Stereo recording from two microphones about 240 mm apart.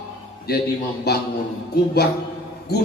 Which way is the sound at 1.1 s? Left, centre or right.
Left.